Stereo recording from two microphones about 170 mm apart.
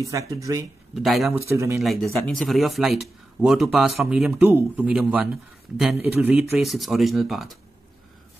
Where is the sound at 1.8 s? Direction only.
Centre (ahead or behind).